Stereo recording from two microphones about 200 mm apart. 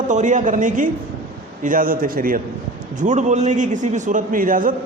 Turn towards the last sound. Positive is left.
turn(degrees=-45)  # may be behind; listen again after turning